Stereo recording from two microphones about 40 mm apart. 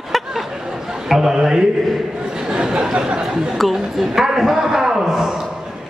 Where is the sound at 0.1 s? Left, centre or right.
Centre.